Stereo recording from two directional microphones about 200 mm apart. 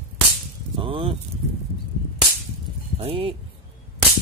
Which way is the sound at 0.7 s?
25° right (ahead or behind).